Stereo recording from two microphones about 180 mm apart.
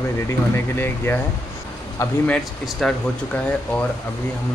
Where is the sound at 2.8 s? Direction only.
Centre (ahead or behind).